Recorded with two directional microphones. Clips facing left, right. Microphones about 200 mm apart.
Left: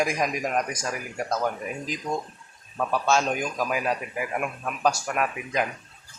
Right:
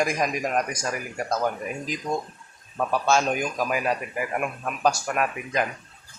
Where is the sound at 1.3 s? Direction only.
10° right (ahead or behind).